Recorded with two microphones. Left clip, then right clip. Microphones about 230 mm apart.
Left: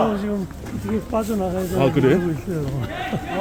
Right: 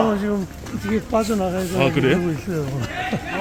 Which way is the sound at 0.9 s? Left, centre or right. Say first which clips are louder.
Right 3 dB; right.